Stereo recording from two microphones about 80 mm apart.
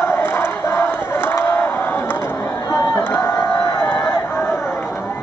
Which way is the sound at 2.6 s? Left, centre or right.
Left.